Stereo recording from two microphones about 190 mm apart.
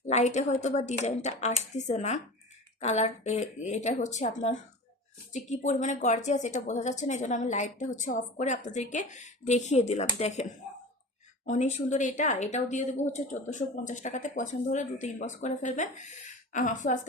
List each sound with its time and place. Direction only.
0.1 s a woman's voice: 35° left (ahead or behind)
11.4 s a woman's voice: 40° left (ahead or behind)